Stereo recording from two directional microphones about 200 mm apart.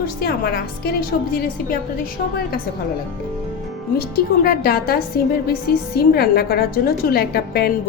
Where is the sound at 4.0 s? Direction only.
50° left (ahead or behind).